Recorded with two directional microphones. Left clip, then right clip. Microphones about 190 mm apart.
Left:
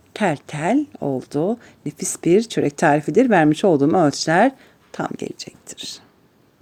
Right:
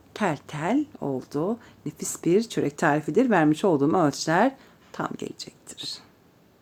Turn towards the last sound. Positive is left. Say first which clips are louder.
# left 2 dB
turn(degrees=20)  # may be behind; listen again after turning